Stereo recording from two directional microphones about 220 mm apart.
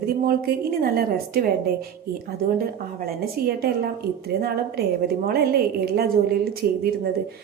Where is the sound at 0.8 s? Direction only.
45° right (ahead or behind).